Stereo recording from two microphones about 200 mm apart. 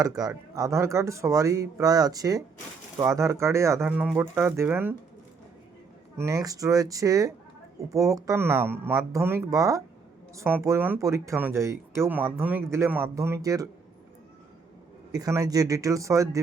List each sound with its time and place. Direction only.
0.0 s speech: 20° right (ahead or behind)
6.1 s speech: 15° right (ahead or behind)
15.1 s speech: 20° right (ahead or behind)